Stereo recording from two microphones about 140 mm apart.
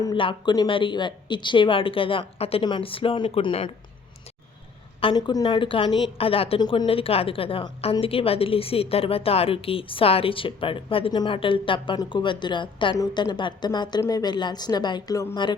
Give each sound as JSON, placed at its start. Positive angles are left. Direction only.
{"t": 0.0, "sound": "a woman's voice", "side_deg": 35}
{"t": 4.9, "sound": "a woman's voice", "side_deg": 35}